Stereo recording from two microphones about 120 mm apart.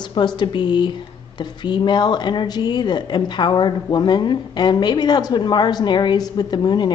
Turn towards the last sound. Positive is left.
turn(degrees=35)  # may be behind; listen again after turning